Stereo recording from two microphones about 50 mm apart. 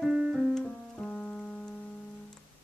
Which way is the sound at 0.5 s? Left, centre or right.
Centre.